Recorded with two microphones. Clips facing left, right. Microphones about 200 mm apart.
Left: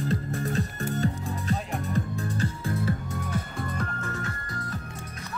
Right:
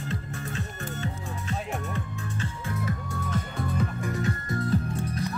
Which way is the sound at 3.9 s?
15° right (ahead or behind).